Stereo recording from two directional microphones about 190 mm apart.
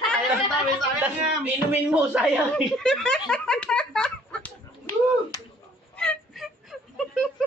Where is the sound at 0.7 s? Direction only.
10° right (ahead or behind).